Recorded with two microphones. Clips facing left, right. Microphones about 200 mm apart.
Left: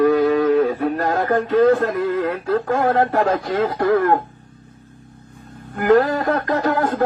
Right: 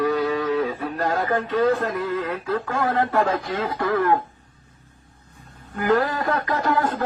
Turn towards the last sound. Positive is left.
turn(degrees=50)  # may be behind; listen again after turning